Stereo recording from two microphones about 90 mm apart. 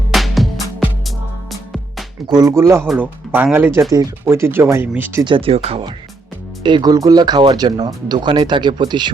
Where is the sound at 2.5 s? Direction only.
30° right (ahead or behind).